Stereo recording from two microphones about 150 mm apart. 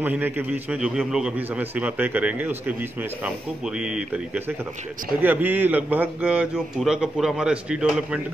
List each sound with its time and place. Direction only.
0.0 s a man's voice: 10° right (ahead or behind)
5.2 s a man's voice: 10° right (ahead or behind)